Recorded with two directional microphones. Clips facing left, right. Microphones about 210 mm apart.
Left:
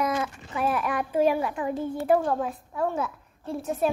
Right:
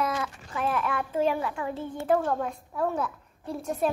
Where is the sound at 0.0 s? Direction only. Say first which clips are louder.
Left 2 dB; 20° left (ahead or behind).